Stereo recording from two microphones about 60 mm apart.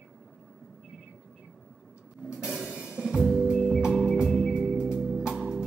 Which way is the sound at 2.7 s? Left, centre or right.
Centre.